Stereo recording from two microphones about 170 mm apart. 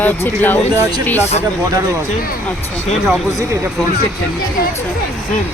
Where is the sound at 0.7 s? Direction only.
20° right (ahead or behind).